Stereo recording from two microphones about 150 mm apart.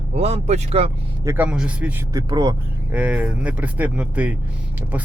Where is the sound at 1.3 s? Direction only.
10° right (ahead or behind).